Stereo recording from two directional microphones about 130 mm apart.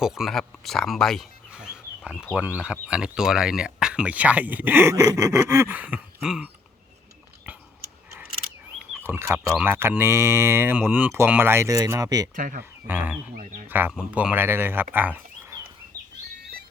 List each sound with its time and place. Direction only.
0.0 s speech: 5° right (ahead or behind)
1.5 s speech: 5° right (ahead or behind)
9.0 s speech: 20° right (ahead or behind)
12.9 s speech: 15° right (ahead or behind)
14.9 s a sound: 15° right (ahead or behind)